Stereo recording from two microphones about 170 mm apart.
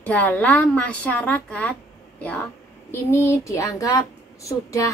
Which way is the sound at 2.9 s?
15° left (ahead or behind).